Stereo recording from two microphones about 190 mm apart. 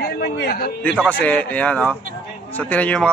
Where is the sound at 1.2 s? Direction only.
5° left (ahead or behind).